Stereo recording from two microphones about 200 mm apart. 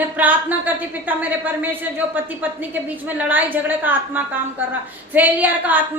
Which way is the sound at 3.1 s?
10° right (ahead or behind).